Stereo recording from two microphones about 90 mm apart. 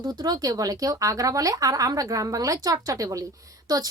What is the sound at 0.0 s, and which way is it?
Speech, 45° right (ahead or behind).